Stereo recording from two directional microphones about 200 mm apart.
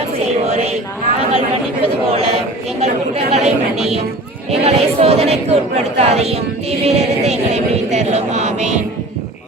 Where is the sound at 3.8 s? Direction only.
30° right (ahead or behind).